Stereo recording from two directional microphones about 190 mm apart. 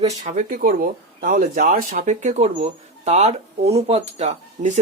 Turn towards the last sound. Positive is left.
turn(degrees=-35)  # may be behind; listen again after turning